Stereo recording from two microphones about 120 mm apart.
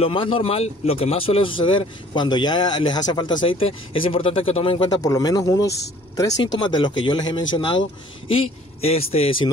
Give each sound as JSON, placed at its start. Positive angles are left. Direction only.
{"t": 0.0, "sound": "speech", "side_deg": 50}
{"t": 5.0, "sound": "speech", "side_deg": 30}
{"t": 6.4, "sound": "speech", "side_deg": 40}
{"t": 8.3, "sound": "a man's voice", "side_deg": 55}